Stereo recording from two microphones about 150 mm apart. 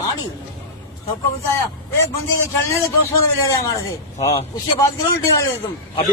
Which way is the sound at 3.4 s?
25° left (ahead or behind).